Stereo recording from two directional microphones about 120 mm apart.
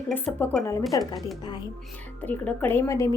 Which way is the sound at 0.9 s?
30° left (ahead or behind).